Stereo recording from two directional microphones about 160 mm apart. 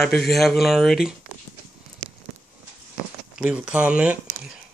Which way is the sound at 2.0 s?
35° left (ahead or behind).